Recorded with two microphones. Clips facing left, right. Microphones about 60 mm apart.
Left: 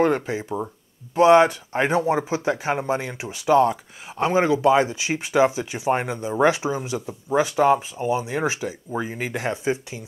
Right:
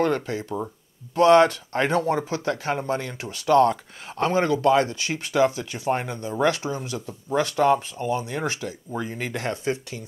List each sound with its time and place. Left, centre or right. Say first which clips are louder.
0.0 s speech: left 3 dB; centre